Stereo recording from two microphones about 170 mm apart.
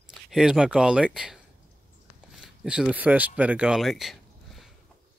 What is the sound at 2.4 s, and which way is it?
Speech, 5° right (ahead or behind).